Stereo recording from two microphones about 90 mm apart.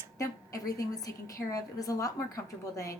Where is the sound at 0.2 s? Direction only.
40° left (ahead or behind).